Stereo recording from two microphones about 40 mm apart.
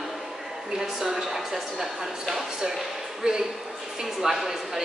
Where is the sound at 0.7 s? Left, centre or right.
Centre.